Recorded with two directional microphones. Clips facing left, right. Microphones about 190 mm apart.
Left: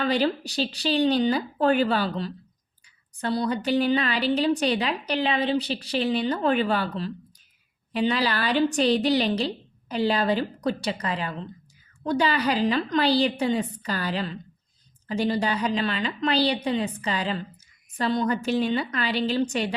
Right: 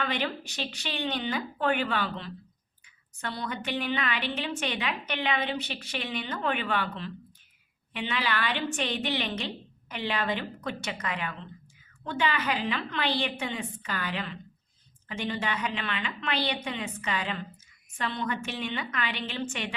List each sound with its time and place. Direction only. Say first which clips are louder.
0.0 s a woman's voice: left 8 dB; 35° left (ahead or behind)